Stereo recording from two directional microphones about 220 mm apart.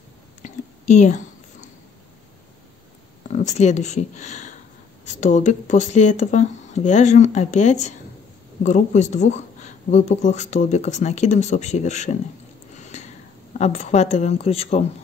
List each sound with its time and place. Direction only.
0.4 s whispering: 30° left (ahead or behind)
3.3 s speech: 30° left (ahead or behind)
12.9 s a sound: 30° left (ahead or behind)
13.5 s speech: 35° left (ahead or behind)